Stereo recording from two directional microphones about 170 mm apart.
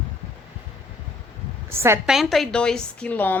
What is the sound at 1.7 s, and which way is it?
Speech, 15° right (ahead or behind).